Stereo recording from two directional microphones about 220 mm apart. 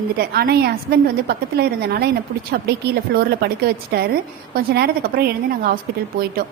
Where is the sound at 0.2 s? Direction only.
45° right (ahead or behind).